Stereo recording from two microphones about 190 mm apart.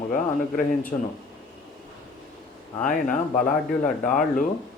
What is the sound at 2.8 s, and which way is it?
Speech, 45° left (ahead or behind).